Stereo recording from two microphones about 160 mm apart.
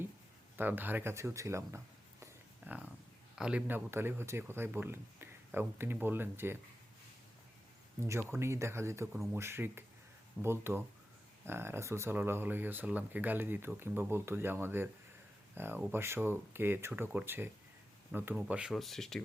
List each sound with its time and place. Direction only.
0.5 s speech: 10° right (ahead or behind)
2.2 s a sound: 10° right (ahead or behind)
3.3 s speech: 5° right (ahead or behind)
8.3 s speech: 15° right (ahead or behind); by 19.2 s centre (ahead or behind)